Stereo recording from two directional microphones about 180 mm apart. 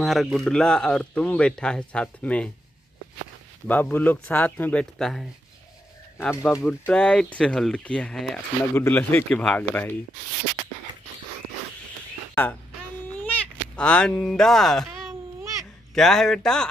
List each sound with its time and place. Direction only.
0.0 s speech: centre (ahead or behind)
3.6 s speech: 10° left (ahead or behind)
6.2 s speech: 10° left (ahead or behind)
13.1 s speech: 10° left (ahead or behind)
15.9 s speech: centre (ahead or behind)